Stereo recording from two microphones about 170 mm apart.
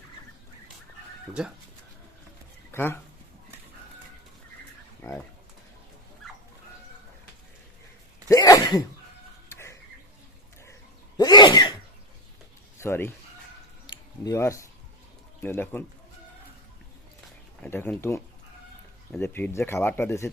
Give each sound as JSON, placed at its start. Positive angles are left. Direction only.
{"t": 1.3, "sound": "speech", "side_deg": -5}
{"t": 2.7, "sound": "speech", "side_deg": 15}
{"t": 5.0, "sound": "speech", "side_deg": 15}
{"t": 8.3, "sound": "sneeze", "side_deg": 20}
{"t": 9.5, "sound": "a sound", "side_deg": 15}
{"t": 11.2, "sound": "sneeze", "side_deg": 25}
{"t": 12.8, "sound": "speech", "side_deg": 15}
{"t": 13.8, "sound": "a sound", "side_deg": 20}
{"t": 15.4, "sound": "speech", "side_deg": 10}
{"t": 17.6, "sound": "speech", "side_deg": 10}